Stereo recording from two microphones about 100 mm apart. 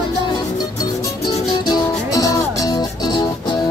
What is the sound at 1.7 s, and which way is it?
Music, 35° left (ahead or behind).